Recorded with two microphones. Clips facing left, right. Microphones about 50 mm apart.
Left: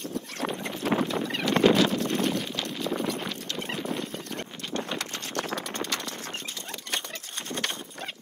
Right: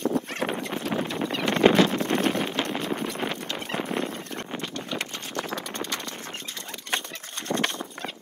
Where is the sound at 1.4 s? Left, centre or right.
Right.